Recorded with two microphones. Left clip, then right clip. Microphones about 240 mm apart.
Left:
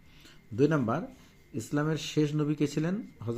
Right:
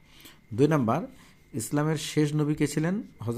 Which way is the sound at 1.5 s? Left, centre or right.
Right.